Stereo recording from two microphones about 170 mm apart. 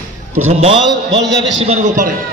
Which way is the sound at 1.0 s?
90° right.